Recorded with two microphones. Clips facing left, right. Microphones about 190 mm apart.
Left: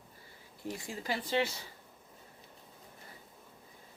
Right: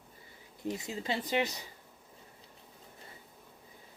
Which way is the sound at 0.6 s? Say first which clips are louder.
Right 3 dB; 20° right (ahead or behind).